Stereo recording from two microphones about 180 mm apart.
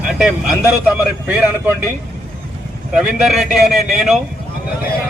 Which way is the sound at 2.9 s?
5° right (ahead or behind).